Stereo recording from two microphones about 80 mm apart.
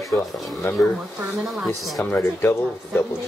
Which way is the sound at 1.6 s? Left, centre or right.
Centre.